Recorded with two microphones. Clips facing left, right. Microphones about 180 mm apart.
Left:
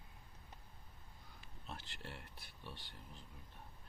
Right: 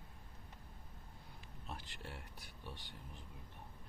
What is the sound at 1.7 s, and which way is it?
Speech, 10° right (ahead or behind).